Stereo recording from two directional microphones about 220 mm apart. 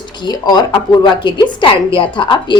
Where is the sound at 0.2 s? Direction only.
20° left (ahead or behind).